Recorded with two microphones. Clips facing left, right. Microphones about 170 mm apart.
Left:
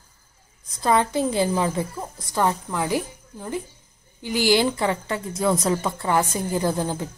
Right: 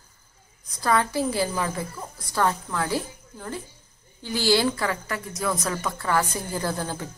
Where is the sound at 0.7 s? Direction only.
20° left (ahead or behind).